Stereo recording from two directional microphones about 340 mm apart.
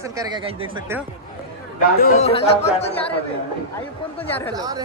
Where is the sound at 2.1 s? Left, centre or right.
Centre.